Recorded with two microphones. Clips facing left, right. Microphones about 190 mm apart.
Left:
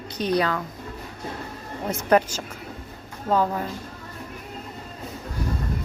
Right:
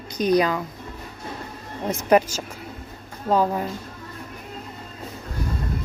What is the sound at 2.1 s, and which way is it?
Speech, 10° right (ahead or behind).